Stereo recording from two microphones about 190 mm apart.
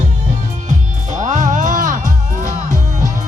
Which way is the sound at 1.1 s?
40° right (ahead or behind).